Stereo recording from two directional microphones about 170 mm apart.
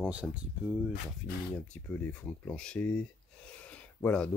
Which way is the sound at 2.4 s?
5° left (ahead or behind).